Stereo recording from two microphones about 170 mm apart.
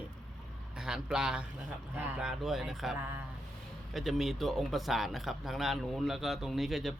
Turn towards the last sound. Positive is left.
turn(degrees=0)  # may be behind; listen again after turning